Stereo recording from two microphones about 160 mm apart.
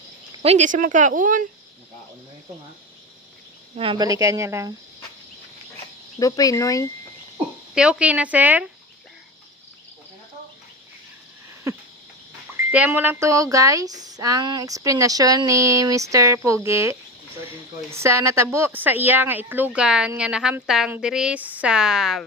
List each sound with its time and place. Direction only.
0.4 s speech: 45° right (ahead or behind)
3.8 s speech: 35° right (ahead or behind)
4.0 s speech: 20° right (ahead or behind)
6.1 s speech: 20° left (ahead or behind)
7.8 s speech: 5° right (ahead or behind)
12.7 s speech: 10° right (ahead or behind)